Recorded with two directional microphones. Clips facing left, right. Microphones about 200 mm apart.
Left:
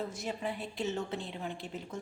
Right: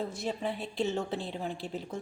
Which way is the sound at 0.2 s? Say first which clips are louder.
Right 3 dB; 30° right (ahead or behind).